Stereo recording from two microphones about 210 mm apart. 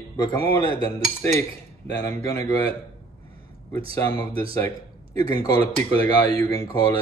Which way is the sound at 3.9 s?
10° left (ahead or behind).